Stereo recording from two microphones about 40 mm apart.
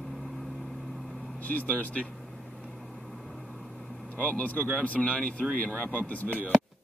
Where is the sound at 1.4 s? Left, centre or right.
Left.